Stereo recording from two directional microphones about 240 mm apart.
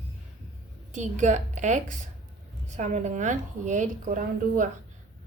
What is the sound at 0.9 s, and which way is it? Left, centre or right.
A woman's voice, right.